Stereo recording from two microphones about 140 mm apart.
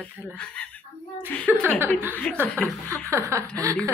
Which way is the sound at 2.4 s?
15° right (ahead or behind).